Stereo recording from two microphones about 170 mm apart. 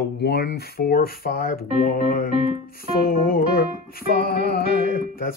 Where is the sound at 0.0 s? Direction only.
70° left (ahead or behind).